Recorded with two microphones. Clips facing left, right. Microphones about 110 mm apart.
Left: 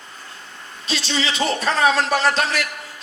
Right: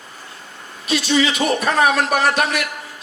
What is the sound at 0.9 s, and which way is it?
A man's voice, 30° left (ahead or behind).